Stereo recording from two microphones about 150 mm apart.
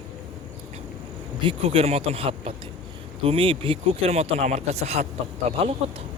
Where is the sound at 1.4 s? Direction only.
35° right (ahead or behind).